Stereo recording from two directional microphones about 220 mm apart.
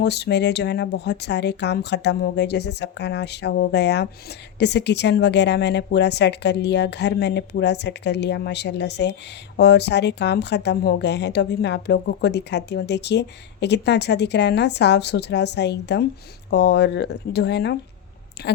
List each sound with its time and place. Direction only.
0.0 s speech: 50° left (ahead or behind)